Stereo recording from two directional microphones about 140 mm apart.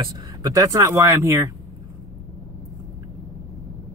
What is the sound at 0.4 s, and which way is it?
Speech, 25° right (ahead or behind).